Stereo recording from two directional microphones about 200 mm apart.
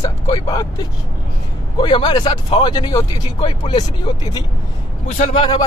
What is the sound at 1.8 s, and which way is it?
Speech, 25° left (ahead or behind).